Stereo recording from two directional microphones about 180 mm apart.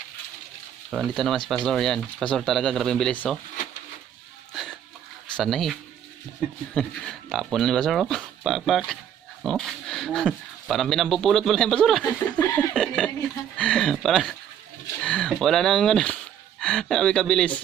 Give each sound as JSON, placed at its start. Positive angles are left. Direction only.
{"t": 0.9, "sound": "speech", "side_deg": 0}
{"t": 5.4, "sound": "speech", "side_deg": 0}
{"t": 6.7, "sound": "speech", "side_deg": 5}